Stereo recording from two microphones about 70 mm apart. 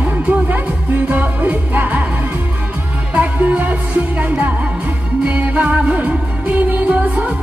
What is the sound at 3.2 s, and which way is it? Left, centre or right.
Music, right.